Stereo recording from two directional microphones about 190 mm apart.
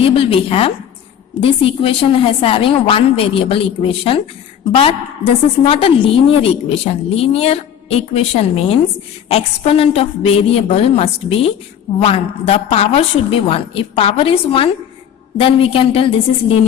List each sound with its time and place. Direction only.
0.0 s a woman's voice: 30° left (ahead or behind)